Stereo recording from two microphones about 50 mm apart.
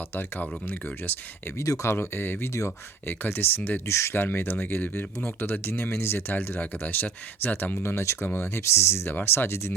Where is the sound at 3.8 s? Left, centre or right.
Left.